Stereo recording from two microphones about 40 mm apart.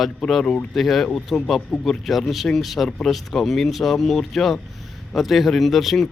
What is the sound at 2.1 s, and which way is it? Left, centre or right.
Speech, centre.